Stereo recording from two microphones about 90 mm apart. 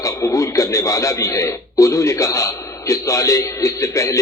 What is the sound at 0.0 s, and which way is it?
A man's voice, 35° left (ahead or behind).